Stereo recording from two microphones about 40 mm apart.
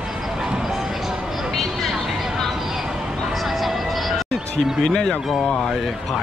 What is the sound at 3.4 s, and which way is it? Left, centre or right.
Music, centre.